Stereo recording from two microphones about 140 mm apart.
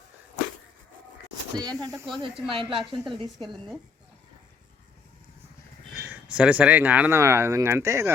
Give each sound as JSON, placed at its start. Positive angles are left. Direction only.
{"t": 1.5, "sound": "speech", "side_deg": -30}
{"t": 2.1, "sound": "speech", "side_deg": -35}
{"t": 3.3, "sound": "a woman's voice", "side_deg": 0}
{"t": 5.9, "sound": "speech", "side_deg": -5}